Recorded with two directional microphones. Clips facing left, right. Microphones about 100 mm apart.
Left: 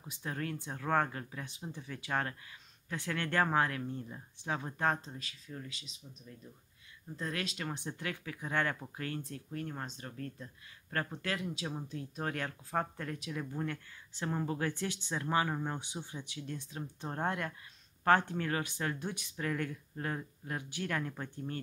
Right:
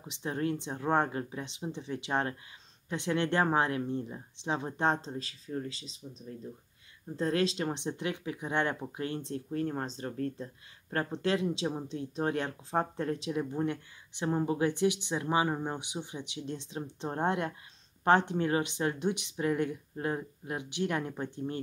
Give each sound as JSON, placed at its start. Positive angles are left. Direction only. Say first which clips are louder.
{"t": 0.0, "sound": "speech", "louder": "right 6 dB", "side_deg": -25}